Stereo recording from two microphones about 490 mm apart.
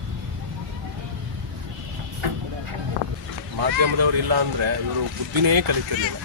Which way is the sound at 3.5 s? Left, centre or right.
Right.